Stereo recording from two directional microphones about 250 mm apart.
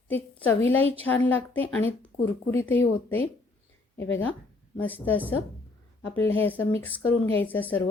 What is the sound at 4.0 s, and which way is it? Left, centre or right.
Speech, left.